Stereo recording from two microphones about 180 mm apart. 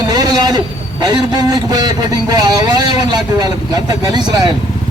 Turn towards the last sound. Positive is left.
turn(degrees=-25)  # may be behind; listen again after turning